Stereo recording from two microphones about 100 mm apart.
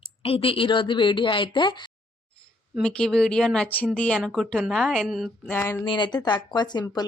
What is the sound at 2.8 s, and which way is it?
A woman's voice, 5° left (ahead or behind).